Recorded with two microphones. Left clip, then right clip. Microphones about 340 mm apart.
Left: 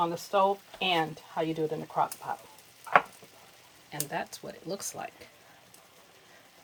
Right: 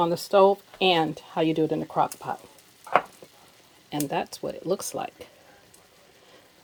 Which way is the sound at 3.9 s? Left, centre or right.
Right.